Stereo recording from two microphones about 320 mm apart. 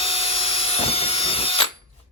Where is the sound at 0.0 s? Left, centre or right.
Centre.